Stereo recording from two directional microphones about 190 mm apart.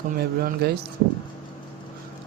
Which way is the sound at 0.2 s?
55° right (ahead or behind).